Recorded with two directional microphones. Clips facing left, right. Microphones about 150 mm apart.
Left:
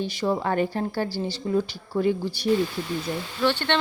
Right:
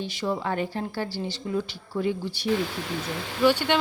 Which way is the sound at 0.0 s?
40° left (ahead or behind).